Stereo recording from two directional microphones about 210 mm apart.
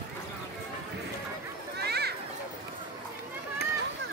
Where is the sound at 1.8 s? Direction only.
50° right (ahead or behind).